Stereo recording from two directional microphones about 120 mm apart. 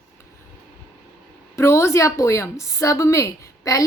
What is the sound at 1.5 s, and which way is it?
A woman's voice, 20° left (ahead or behind).